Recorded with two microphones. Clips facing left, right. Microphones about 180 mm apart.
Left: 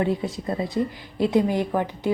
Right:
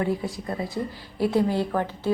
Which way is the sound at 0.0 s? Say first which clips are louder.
Left 2 dB; 20° left (ahead or behind).